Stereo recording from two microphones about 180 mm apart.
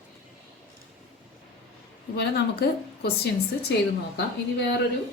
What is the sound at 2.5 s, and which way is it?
Speech, 60° left (ahead or behind).